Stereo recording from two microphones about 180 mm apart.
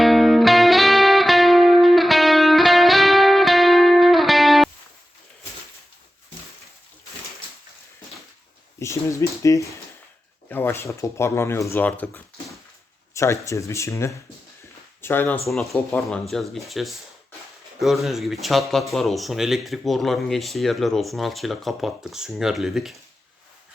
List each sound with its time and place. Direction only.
0.0 s music: centre (ahead or behind)
8.8 s speech: 15° left (ahead or behind)
15.4 s speech: centre (ahead or behind)